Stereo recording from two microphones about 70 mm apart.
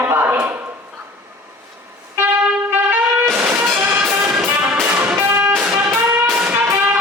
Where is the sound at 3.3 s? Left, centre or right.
Right.